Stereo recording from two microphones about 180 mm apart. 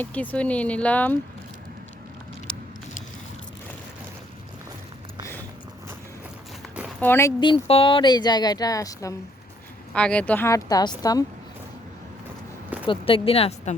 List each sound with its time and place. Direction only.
0.0 s a woman's voice: 10° left (ahead or behind)
2.5 s a sound: 5° left (ahead or behind)
7.0 s speech: 15° left (ahead or behind)
9.9 s a woman's voice: 5° left (ahead or behind)
12.9 s speech: 30° left (ahead or behind)